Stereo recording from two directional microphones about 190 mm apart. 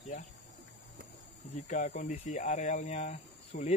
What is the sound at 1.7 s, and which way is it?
Speech, 40° left (ahead or behind).